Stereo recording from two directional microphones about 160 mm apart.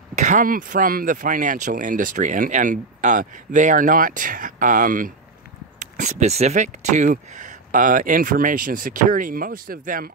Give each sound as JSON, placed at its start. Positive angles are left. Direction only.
{"t": 0.1, "sound": "speech", "side_deg": -50}